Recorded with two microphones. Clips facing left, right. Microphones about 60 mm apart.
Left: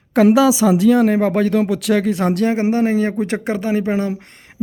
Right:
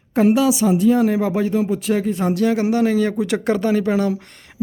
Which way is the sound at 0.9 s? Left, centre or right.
Left.